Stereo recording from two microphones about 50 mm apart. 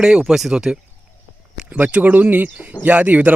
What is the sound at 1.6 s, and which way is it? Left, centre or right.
Speech, right.